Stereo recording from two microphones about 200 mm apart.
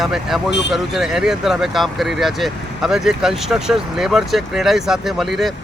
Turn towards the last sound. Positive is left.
turn(degrees=0)  # may be behind; listen again after turning